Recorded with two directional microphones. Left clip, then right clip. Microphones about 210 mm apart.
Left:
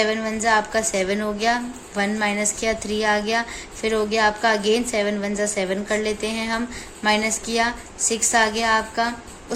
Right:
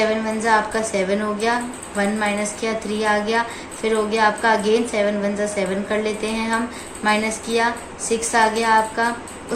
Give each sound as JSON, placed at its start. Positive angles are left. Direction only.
{"t": 0.0, "sound": "a woman's voice", "side_deg": 50}